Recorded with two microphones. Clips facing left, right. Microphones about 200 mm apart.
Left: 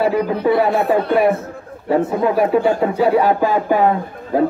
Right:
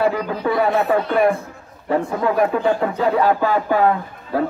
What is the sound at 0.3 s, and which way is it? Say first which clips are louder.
Speech: left 5 dB; 25° left (ahead or behind).